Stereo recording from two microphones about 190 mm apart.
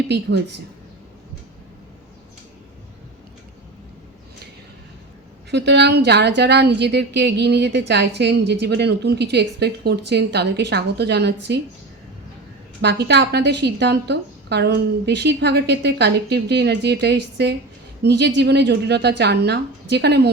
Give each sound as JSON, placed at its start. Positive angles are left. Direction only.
{"t": 0.1, "sound": "a woman's voice", "side_deg": -65}
{"t": 5.5, "sound": "a woman's voice", "side_deg": -65}
{"t": 12.8, "sound": "a woman's voice", "side_deg": -60}